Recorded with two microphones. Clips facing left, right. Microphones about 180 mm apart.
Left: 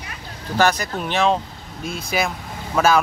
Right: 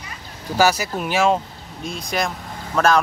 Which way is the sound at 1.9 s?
5° left (ahead or behind).